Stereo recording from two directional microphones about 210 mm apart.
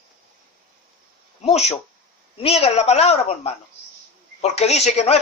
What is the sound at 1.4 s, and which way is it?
Speech, 30° left (ahead or behind).